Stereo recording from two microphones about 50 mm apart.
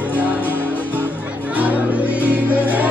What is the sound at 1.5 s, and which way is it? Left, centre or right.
Music, right.